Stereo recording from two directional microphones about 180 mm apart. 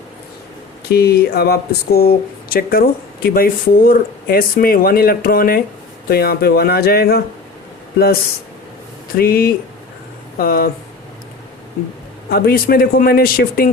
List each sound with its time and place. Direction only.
0.9 s speech: 60° left (ahead or behind)
12.3 s speech: 60° left (ahead or behind)